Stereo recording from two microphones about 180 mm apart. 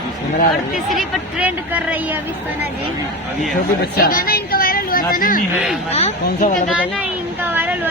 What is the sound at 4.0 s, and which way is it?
A woman's voice, 55° left (ahead or behind).